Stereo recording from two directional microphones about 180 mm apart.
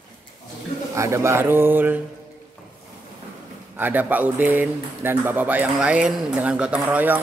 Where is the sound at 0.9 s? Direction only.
15° right (ahead or behind).